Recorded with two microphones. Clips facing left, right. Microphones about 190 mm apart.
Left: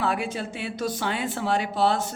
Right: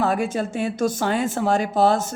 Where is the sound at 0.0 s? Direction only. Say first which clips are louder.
Right 5 dB; 45° right (ahead or behind).